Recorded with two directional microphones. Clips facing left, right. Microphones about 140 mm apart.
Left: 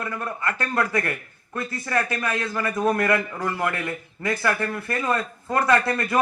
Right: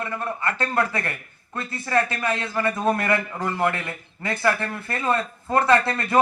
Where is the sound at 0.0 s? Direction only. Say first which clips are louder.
Right 1 dB; 30° right (ahead or behind).